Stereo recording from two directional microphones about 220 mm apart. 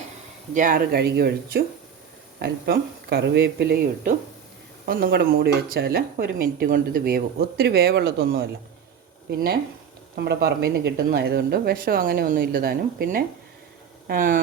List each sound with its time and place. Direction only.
0.5 s speech: 40° right (ahead or behind)
10.2 s speech: 45° right (ahead or behind)